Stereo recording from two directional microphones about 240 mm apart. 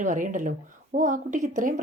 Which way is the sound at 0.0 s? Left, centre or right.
Right.